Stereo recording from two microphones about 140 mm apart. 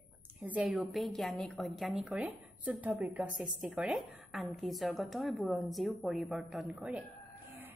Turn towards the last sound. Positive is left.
turn(degrees=-10)  # may be behind; listen again after turning